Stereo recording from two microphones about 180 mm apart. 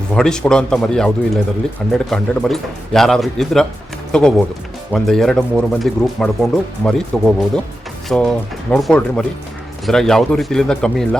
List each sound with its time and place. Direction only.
0.1 s speech: 5° left (ahead or behind)